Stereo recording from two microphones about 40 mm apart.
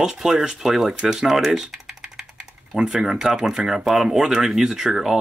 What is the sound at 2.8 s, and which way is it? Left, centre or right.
Speech, centre.